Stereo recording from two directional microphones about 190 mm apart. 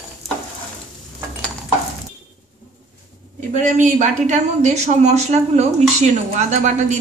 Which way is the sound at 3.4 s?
40° right (ahead or behind).